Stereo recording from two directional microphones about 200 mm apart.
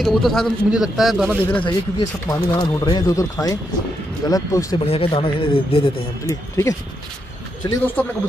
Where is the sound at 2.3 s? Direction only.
20° left (ahead or behind).